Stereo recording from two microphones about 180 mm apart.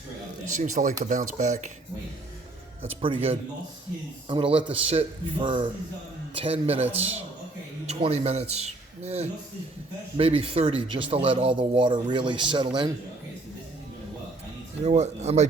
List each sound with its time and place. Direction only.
0.4 s a man's voice: 45° right (ahead or behind)
4.3 s a man's voice: 30° right (ahead or behind)
14.8 s a man's voice: 40° right (ahead or behind)